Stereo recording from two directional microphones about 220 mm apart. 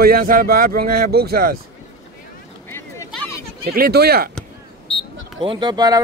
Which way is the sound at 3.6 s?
45° right (ahead or behind).